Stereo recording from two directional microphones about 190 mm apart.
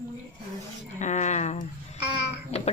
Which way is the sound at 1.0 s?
40° left (ahead or behind).